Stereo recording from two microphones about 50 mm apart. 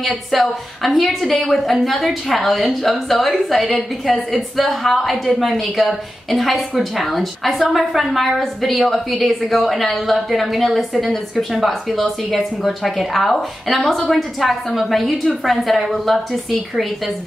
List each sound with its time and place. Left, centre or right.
0.3 s a woman's voice: centre